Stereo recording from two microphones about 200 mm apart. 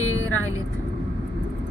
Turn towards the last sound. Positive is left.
turn(degrees=90)